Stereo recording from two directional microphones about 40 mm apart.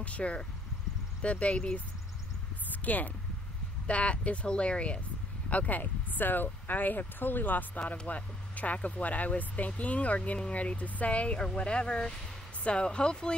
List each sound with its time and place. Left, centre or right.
0.0 s speech: left
2.7 s a sound: left
3.8 s speech: left
5.5 s speech: left